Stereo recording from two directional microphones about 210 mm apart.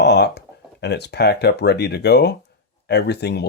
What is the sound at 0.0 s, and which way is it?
Speech, 55° left (ahead or behind).